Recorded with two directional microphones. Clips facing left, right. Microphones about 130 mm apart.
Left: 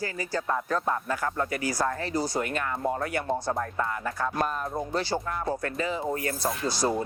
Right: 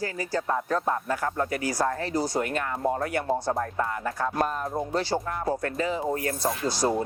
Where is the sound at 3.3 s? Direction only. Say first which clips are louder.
Right 2 dB; 25° right (ahead or behind).